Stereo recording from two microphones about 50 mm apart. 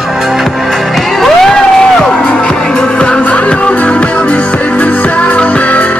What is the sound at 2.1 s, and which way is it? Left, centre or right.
Music, left.